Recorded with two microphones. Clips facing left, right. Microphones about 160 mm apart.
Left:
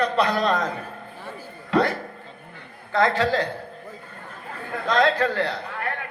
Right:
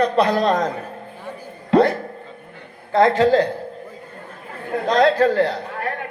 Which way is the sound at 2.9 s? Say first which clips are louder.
Right 6 dB; 40° right (ahead or behind).